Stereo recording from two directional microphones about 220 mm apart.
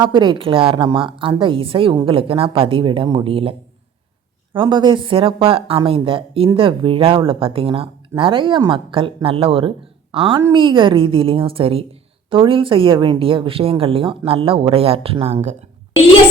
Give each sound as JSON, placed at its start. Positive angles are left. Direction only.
{"t": 0.0, "sound": "speech", "side_deg": -20}
{"t": 4.5, "sound": "speech", "side_deg": -20}